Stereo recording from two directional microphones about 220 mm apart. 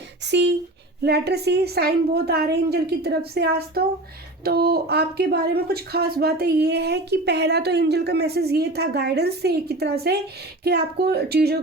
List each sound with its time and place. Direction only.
0.3 s speech: 55° right (ahead or behind)